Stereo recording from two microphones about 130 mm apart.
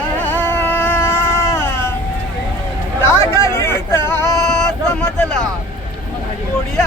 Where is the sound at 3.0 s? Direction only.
20° left (ahead or behind).